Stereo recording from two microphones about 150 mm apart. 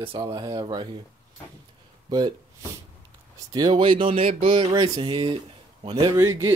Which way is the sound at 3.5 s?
30° right (ahead or behind).